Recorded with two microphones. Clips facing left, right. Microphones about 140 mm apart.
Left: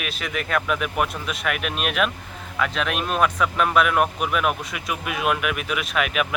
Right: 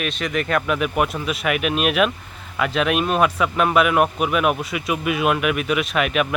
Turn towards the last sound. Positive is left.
turn(degrees=0)  # may be behind; listen again after turning